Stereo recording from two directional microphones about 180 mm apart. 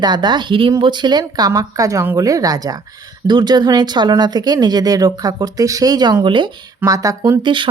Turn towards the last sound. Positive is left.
turn(degrees=-25)  # may be behind; listen again after turning